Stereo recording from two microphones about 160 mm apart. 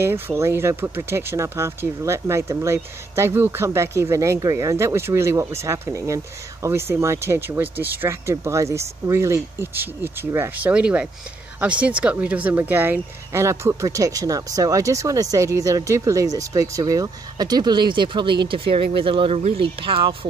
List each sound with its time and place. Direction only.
0.0 s speech: 15° right (ahead or behind); by 20.2 s 35° right (ahead or behind)